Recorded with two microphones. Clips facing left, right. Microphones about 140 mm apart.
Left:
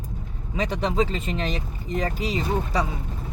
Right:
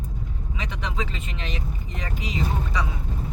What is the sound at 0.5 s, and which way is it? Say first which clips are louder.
Speech: left 9 dB; 35° left (ahead or behind).